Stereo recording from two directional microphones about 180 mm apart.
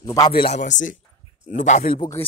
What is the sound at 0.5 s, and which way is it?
A man's voice, 45° left (ahead or behind).